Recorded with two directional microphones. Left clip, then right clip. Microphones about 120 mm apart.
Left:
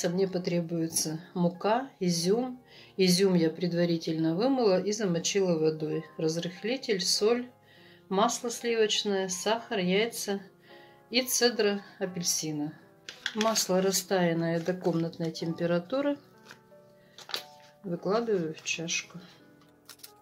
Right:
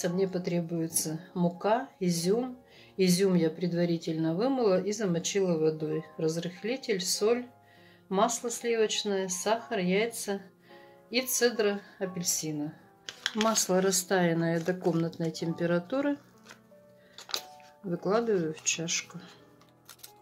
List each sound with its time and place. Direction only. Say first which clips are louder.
0.0 s speech: left 1 dB; 10° left (ahead or behind)
13.0 s speech: even; 10° right (ahead or behind)
17.8 s speech: right 1 dB; 20° right (ahead or behind)